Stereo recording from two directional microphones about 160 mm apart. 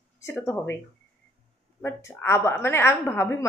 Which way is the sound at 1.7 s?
15° left (ahead or behind).